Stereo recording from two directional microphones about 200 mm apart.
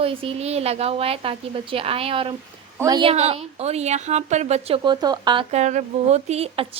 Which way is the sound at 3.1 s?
30° right (ahead or behind).